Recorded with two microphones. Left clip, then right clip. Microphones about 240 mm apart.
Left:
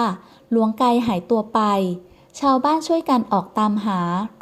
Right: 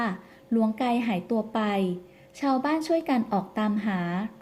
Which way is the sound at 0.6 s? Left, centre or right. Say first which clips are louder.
Left 8 dB; left.